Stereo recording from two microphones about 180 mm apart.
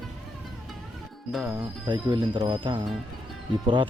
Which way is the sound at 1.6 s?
25° right (ahead or behind).